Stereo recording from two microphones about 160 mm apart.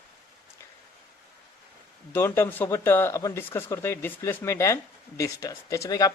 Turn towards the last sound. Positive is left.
turn(degrees=20)  # may be behind; listen again after turning